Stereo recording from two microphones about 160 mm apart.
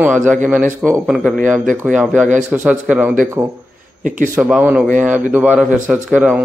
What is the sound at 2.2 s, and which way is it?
Speech, 50° right (ahead or behind).